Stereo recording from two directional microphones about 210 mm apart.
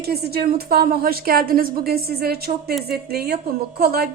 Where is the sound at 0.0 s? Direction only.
50° right (ahead or behind).